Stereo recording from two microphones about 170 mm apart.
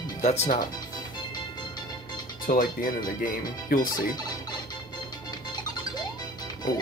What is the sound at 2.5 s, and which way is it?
Speech, 55° left (ahead or behind).